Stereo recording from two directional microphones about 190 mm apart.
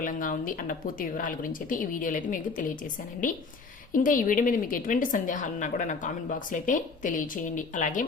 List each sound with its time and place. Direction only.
0.0 s a woman's voice: 45° left (ahead or behind)
3.9 s a woman's voice: 45° left (ahead or behind)